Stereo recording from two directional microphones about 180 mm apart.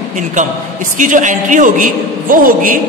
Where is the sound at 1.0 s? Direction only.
45° right (ahead or behind).